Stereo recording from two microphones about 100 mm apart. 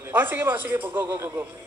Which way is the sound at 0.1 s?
20° right (ahead or behind).